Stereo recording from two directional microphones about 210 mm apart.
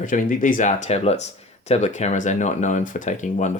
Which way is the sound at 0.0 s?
40° left (ahead or behind).